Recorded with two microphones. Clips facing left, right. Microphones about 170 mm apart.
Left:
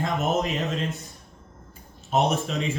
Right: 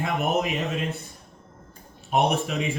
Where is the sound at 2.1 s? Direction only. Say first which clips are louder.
Even; 15° right (ahead or behind).